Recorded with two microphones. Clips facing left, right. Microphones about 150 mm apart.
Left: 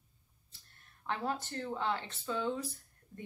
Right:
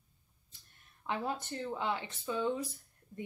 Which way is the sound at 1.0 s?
15° right (ahead or behind).